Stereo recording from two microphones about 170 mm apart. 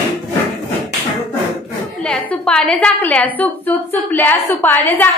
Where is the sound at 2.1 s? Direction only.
5° left (ahead or behind).